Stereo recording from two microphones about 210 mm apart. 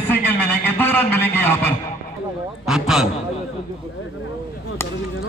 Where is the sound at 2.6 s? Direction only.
Centre (ahead or behind).